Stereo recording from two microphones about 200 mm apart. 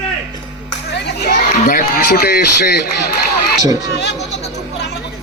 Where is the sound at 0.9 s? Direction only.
55° left (ahead or behind).